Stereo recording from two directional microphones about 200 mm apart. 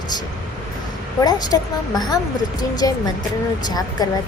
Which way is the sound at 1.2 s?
20° left (ahead or behind).